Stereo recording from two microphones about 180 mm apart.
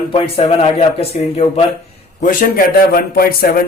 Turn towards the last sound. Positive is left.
turn(degrees=55)  # may be behind; listen again after turning